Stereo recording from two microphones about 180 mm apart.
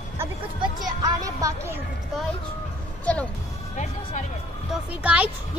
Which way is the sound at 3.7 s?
40° left (ahead or behind).